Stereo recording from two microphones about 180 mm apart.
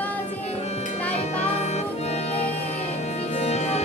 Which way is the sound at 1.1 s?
35° left (ahead or behind).